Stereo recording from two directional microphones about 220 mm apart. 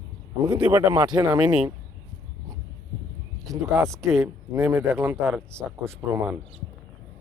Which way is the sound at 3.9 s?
Centre (ahead or behind).